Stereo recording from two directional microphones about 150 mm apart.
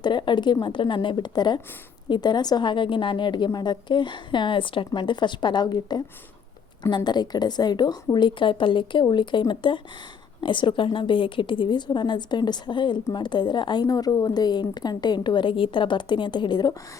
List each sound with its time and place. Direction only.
0.0 s a woman's voice: 30° left (ahead or behind)